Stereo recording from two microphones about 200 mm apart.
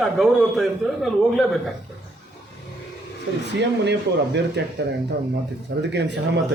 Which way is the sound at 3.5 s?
60° right (ahead or behind).